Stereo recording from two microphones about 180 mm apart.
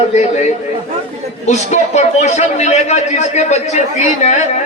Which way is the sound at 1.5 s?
40° left (ahead or behind).